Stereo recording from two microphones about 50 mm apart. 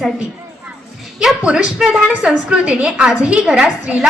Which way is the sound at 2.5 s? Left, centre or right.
Right.